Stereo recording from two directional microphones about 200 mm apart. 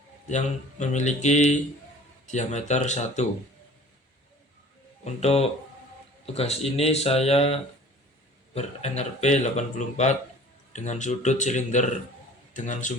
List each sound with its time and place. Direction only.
0.3 s speech: 35° left (ahead or behind)
5.0 s speech: 30° left (ahead or behind)